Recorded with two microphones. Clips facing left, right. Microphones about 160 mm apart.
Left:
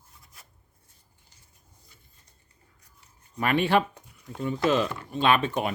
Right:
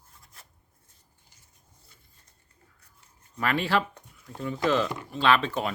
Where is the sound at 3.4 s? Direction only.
20° left (ahead or behind).